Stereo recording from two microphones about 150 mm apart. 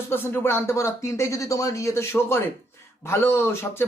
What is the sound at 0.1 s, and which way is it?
Speech, 15° left (ahead or behind).